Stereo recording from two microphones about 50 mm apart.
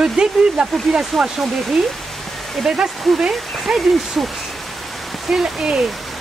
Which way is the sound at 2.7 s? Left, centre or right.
Centre.